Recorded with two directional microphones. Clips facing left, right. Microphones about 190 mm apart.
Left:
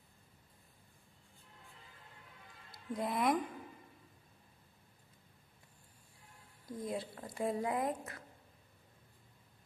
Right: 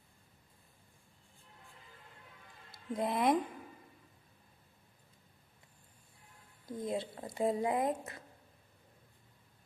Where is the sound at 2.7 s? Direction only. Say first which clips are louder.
Right 3 dB; 25° right (ahead or behind).